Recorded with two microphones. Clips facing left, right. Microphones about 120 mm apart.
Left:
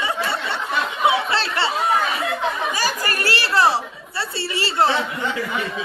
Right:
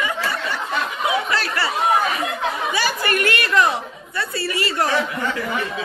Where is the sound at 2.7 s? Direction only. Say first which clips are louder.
Right 2 dB; 40° left (ahead or behind).